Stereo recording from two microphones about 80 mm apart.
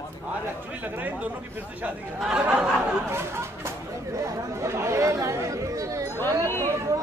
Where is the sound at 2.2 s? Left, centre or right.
Centre.